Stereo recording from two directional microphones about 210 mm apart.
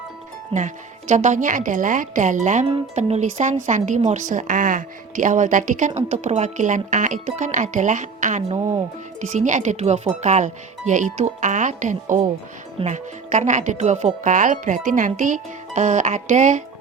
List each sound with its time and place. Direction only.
0.5 s a woman's voice: 35° right (ahead or behind)